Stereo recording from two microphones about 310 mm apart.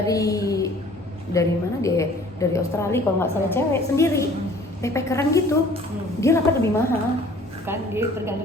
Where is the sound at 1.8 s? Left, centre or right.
Centre.